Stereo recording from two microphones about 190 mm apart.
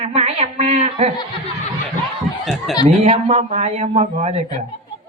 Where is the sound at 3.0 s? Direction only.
35° right (ahead or behind).